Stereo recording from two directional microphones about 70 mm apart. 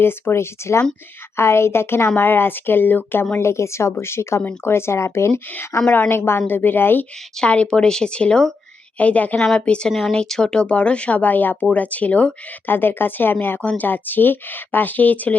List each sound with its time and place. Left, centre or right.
0.0 s a woman's voice: left
3.3 s a woman's voice: left
5.9 s a woman's voice: left
7.3 s speech: centre